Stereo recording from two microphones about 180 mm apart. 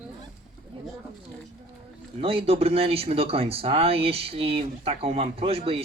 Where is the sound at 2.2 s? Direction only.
30° right (ahead or behind).